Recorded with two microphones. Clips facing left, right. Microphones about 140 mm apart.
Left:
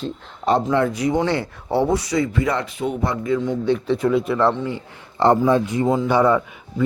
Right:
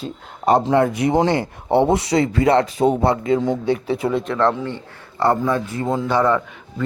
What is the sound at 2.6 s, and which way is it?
Speech, 35° right (ahead or behind).